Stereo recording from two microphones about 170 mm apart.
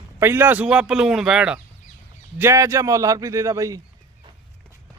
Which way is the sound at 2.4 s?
15° right (ahead or behind).